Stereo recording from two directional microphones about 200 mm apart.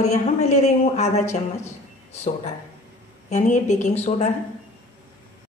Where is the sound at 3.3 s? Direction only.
35° left (ahead or behind).